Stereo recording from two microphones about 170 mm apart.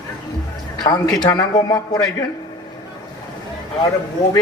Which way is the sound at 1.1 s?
25° left (ahead or behind).